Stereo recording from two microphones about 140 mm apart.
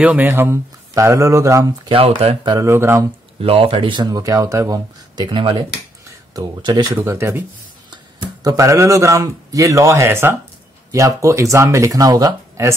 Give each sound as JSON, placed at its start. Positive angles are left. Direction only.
{"t": 0.0, "sound": "speech", "side_deg": -10}
{"t": 1.9, "sound": "speech", "side_deg": -45}
{"t": 2.5, "sound": "speech", "side_deg": -20}
{"t": 3.3, "sound": "speech", "side_deg": -45}
{"t": 7.0, "sound": "speech", "side_deg": -15}
{"t": 7.9, "sound": "speech", "side_deg": -30}